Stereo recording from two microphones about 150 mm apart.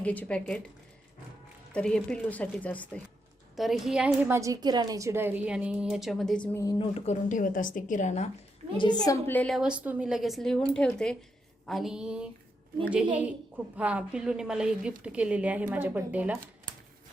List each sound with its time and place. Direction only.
0.0 s a woman's voice: 10° left (ahead or behind)
1.7 s a woman's voice: 5° left (ahead or behind)
3.5 s a woman's voice: centre (ahead or behind)
6.7 s a woman's voice: 40° left (ahead or behind)
8.8 s a woman's voice: 25° left (ahead or behind); by 9.6 s 10° left (ahead or behind)
9.6 s a woman's voice: 5° right (ahead or behind)
13.7 s a woman's voice: 10° right (ahead or behind)